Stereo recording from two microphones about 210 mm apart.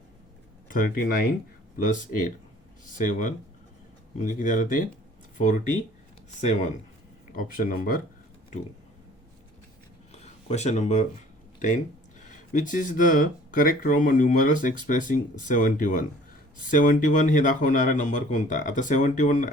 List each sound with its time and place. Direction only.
0.7 s speech: 40° left (ahead or behind)
10.1 s a sound: 30° left (ahead or behind)
12.2 s speech: 35° left (ahead or behind)